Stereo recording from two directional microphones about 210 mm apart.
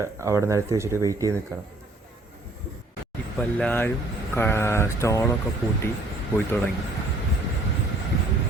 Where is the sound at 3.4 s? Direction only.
5° left (ahead or behind).